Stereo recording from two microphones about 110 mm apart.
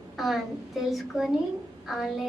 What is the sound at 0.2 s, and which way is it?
A woman's voice, centre (ahead or behind).